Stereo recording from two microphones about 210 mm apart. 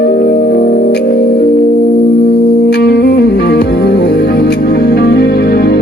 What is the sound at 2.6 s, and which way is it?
Music, 50° left (ahead or behind).